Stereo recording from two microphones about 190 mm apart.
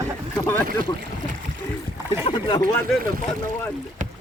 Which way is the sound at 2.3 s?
30° left (ahead or behind).